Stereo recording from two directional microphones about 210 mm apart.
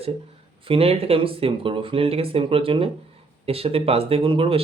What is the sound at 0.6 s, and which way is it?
Speech, 25° right (ahead or behind).